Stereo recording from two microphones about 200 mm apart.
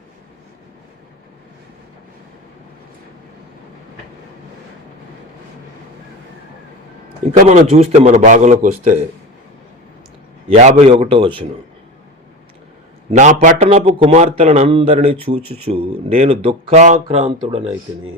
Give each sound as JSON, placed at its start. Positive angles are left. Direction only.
{"t": 7.4, "sound": "a man's voice", "side_deg": -30}
{"t": 10.5, "sound": "a man's voice", "side_deg": -35}
{"t": 13.1, "sound": "a man's voice", "side_deg": -35}